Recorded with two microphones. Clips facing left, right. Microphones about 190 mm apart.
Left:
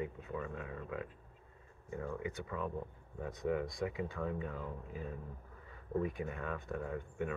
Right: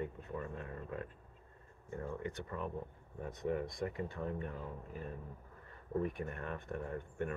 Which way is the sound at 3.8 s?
10° left (ahead or behind).